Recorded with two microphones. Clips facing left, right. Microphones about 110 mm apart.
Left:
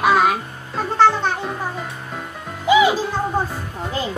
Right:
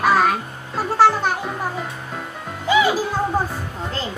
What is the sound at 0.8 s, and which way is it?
Music, 5° right (ahead or behind).